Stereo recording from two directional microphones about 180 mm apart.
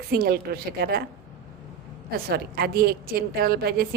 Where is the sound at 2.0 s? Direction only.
55° right (ahead or behind).